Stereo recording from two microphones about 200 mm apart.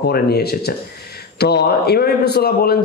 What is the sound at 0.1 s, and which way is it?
A man's voice, 50° left (ahead or behind).